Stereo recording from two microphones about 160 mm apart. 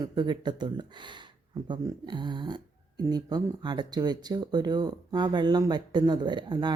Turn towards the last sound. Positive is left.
turn(degrees=-30)  # may be behind; listen again after turning